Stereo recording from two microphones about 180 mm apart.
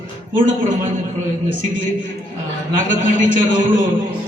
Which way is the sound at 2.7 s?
45° right (ahead or behind).